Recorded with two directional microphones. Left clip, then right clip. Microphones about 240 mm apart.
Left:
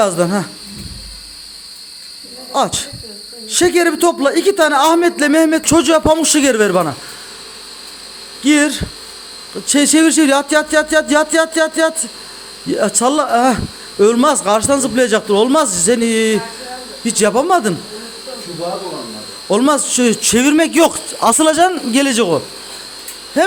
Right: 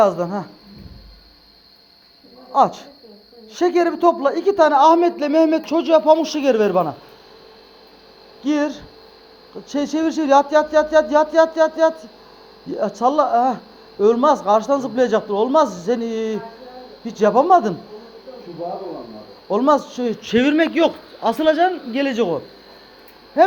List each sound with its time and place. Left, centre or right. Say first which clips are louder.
0.2 s speech: left 8 dB; left
2.5 s a man's voice: even; left
8.4 s a man's voice: left 8 dB; left
13.0 s a man's voice: left 1 dB; left
19.5 s a man's voice: left 3 dB; left